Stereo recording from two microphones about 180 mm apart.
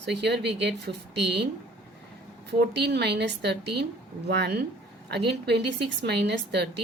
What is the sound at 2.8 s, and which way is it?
A woman's voice, 65° right (ahead or behind).